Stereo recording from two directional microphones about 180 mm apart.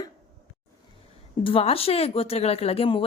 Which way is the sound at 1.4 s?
30° left (ahead or behind).